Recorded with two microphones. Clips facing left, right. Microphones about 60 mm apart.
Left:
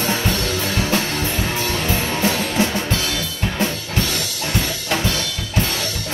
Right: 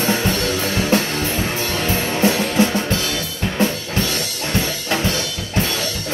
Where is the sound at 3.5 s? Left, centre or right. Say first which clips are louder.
Right 3 dB; right.